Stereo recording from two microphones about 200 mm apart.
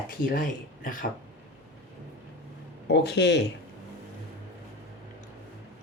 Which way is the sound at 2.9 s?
60° left (ahead or behind).